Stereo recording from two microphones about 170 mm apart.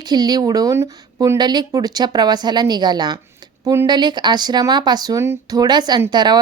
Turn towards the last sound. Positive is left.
turn(degrees=-25)  # may be behind; listen again after turning